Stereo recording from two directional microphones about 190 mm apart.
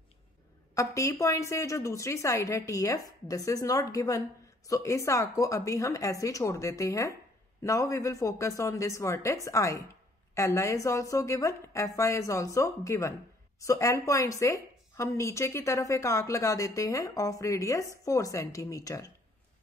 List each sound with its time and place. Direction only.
0.7 s a woman's voice: 15° left (ahead or behind)